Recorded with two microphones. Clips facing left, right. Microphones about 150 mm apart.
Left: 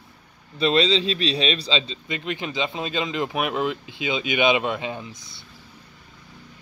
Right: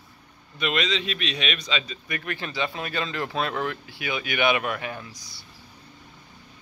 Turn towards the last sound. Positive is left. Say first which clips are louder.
# left 3 dB
turn(degrees=25)  # may be behind; listen again after turning